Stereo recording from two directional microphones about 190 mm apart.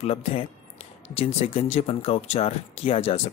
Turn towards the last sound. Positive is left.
turn(degrees=30)  # may be behind; listen again after turning